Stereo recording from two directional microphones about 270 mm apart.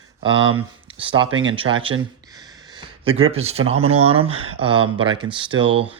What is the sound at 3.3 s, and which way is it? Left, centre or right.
Speech, right.